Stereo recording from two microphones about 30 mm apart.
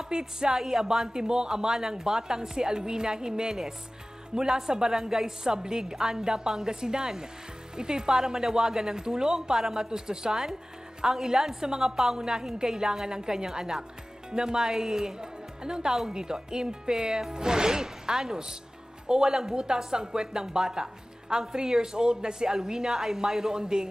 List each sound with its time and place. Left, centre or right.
0.0 s music: right
0.6 s a woman's voice: centre
9.9 s a woman's voice: right
11.9 s a woman's voice: centre